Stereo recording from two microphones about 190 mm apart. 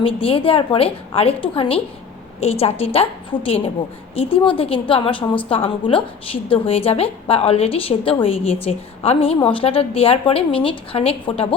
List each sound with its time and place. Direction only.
0.0 s a woman's voice: 30° left (ahead or behind)